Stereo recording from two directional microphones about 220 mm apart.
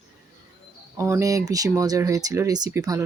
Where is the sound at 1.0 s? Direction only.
15° right (ahead or behind).